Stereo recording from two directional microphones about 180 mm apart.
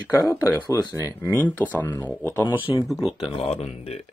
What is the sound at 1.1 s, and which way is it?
Speech, 10° left (ahead or behind).